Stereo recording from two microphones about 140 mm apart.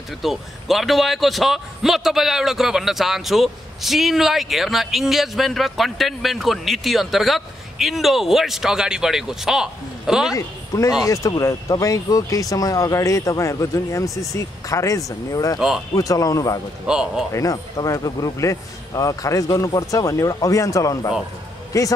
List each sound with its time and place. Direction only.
0.2 s a man's voice: centre (ahead or behind)
10.3 s speech: 25° left (ahead or behind)
16.8 s a man's voice: 5° right (ahead or behind)
17.3 s speech: 25° left (ahead or behind)